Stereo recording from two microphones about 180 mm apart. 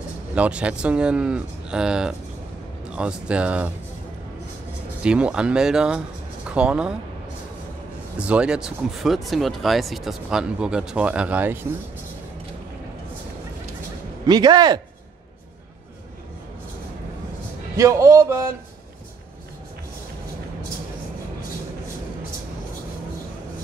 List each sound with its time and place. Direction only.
0.3 s speech: 5° right (ahead or behind)
5.0 s speech: 5° right (ahead or behind)
8.2 s speech: 5° right (ahead or behind)
14.2 s speech: 25° right (ahead or behind)
17.7 s speech: 15° right (ahead or behind)